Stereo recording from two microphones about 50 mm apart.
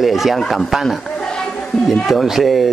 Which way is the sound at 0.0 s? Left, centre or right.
Centre.